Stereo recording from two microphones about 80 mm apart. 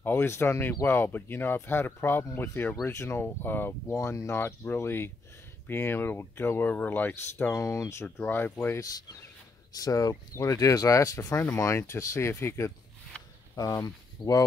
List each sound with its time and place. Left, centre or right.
0.0 s speech: left
3.9 s speech: left
7.6 s speech: left
8.2 s speech: left
9.7 s speech: left
13.1 s a sound: centre
13.6 s speech: left